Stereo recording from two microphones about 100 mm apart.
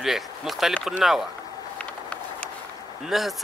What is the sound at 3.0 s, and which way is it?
Speech, centre (ahead or behind).